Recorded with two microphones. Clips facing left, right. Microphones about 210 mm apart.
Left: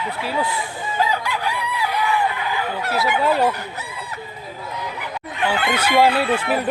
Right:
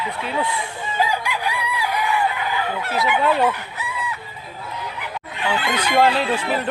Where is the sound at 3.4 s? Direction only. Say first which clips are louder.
Even; 40° left (ahead or behind).